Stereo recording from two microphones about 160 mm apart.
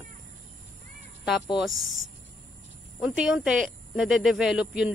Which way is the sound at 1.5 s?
Centre (ahead or behind).